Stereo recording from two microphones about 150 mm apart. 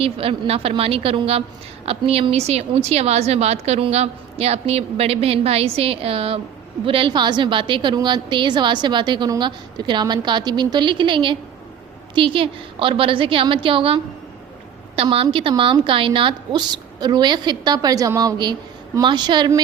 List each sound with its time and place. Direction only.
0.0 s a woman's voice: 40° right (ahead or behind)